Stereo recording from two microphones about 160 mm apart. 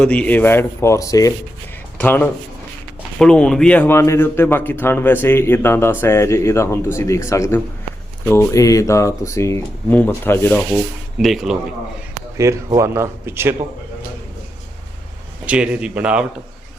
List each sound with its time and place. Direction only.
0.0 s speech: 10° left (ahead or behind)
11.2 s a man's voice: centre (ahead or behind)
12.4 s a man's voice: 20° right (ahead or behind)
15.4 s a man's voice: 5° right (ahead or behind)